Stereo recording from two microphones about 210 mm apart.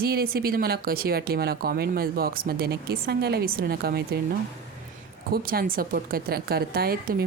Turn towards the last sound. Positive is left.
turn(degrees=-45)  # may be behind; listen again after turning